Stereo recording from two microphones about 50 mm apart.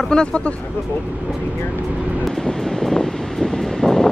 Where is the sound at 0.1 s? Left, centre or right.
Centre.